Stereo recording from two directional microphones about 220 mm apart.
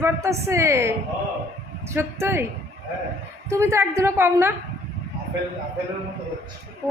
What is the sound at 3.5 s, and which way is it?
A woman's voice, 15° right (ahead or behind).